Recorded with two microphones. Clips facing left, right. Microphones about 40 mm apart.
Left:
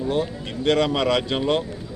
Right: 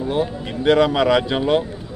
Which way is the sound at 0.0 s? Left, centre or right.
Centre.